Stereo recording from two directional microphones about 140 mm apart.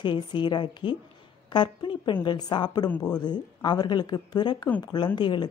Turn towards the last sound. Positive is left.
turn(degrees=35)  # may be behind; listen again after turning